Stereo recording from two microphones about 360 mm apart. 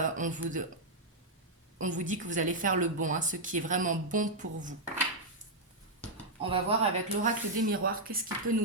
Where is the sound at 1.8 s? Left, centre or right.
Right.